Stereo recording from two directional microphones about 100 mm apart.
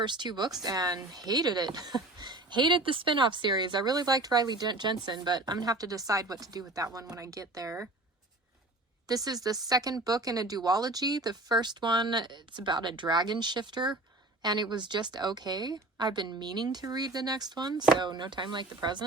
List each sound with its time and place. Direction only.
0.0 s speech: 50° right (ahead or behind); by 7.9 s 30° right (ahead or behind)
9.0 s speech: 40° right (ahead or behind)